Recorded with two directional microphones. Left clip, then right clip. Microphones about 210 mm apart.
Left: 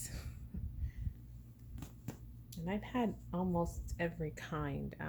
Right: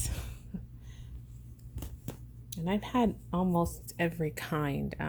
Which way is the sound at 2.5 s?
45° right (ahead or behind).